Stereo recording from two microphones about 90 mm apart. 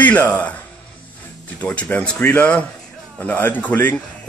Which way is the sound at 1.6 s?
15° left (ahead or behind).